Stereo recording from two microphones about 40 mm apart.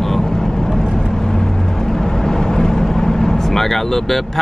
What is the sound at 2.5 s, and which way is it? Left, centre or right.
Vehicle, centre.